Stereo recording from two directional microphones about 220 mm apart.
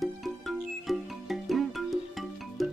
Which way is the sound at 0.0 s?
Centre (ahead or behind).